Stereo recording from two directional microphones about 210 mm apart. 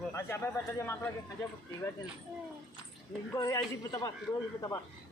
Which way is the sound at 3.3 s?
15° left (ahead or behind).